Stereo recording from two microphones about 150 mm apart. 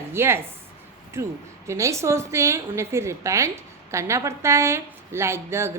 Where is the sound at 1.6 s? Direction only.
20° right (ahead or behind).